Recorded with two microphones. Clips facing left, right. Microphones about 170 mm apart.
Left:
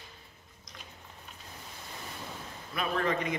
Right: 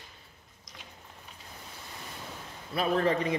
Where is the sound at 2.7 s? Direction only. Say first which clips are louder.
Right 4 dB; 30° right (ahead or behind).